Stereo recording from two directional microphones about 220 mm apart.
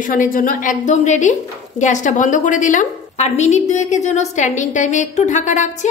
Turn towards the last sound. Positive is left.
turn(degrees=35)  # may be behind; listen again after turning